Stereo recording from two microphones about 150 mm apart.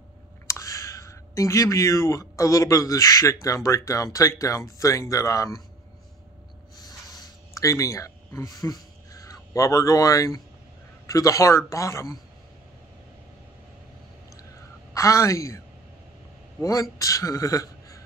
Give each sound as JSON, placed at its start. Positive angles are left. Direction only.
{"t": 0.5, "sound": "speech", "side_deg": 20}
{"t": 6.8, "sound": "a sound", "side_deg": 25}
{"t": 11.1, "sound": "speech", "side_deg": 20}
{"t": 15.0, "sound": "speech", "side_deg": 20}
{"t": 17.0, "sound": "speech", "side_deg": 20}